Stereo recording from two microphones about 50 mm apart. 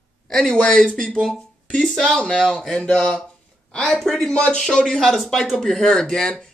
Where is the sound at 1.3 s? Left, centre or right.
Centre.